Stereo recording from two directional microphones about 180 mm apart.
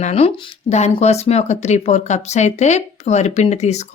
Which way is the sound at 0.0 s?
35° left (ahead or behind).